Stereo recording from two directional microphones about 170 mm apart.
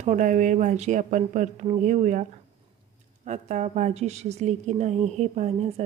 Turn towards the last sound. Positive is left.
turn(degrees=-40)  # may be behind; listen again after turning